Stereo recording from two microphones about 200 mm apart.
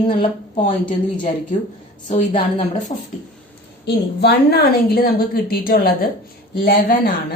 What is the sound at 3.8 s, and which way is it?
A woman's voice, 55° left (ahead or behind).